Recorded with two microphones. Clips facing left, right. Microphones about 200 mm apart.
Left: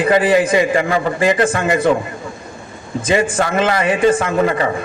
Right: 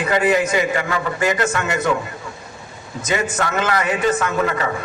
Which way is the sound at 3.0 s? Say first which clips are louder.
Left 5 dB; 30° left (ahead or behind).